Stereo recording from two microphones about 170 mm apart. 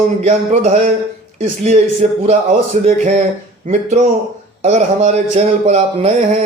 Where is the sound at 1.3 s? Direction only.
40° right (ahead or behind).